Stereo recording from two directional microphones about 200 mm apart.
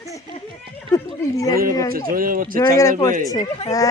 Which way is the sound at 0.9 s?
15° left (ahead or behind).